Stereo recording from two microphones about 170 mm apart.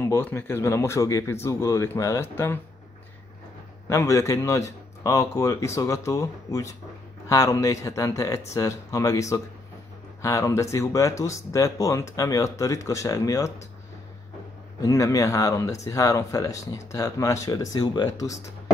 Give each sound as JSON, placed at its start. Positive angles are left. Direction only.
{"t": 0.0, "sound": "speech", "side_deg": 15}
{"t": 3.8, "sound": "speech", "side_deg": 15}
{"t": 14.8, "sound": "speech", "side_deg": 20}